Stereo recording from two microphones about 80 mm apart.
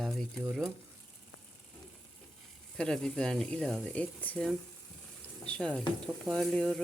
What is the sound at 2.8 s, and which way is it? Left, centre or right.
Speech, centre.